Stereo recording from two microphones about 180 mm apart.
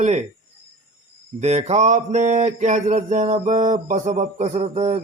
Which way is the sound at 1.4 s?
35° right (ahead or behind).